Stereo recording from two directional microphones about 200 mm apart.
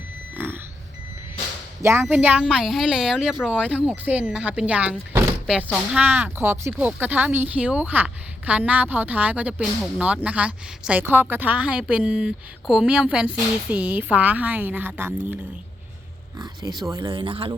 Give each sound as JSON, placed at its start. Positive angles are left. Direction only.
{"t": 0.3, "sound": "a sound", "side_deg": -10}
{"t": 1.8, "sound": "speech", "side_deg": -10}
{"t": 16.4, "sound": "speech", "side_deg": -20}